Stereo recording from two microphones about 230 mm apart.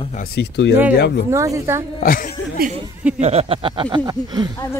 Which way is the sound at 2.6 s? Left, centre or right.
Right.